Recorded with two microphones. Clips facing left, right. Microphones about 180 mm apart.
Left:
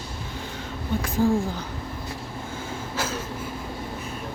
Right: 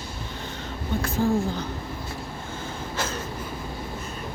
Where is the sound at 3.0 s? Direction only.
5° left (ahead or behind).